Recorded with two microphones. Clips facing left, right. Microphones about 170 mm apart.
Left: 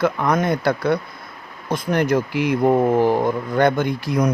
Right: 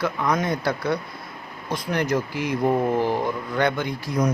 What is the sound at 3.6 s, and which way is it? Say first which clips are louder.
Speech: left 6 dB; 45° left (ahead or behind).